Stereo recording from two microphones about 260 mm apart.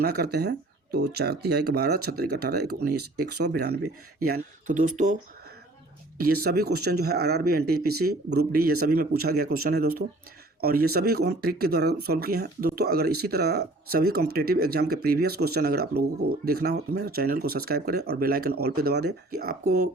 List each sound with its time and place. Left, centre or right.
0.0 s speech: right
6.1 s speech: right